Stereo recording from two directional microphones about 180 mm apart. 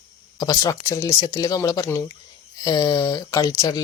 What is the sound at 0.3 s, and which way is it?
Speech, 20° left (ahead or behind).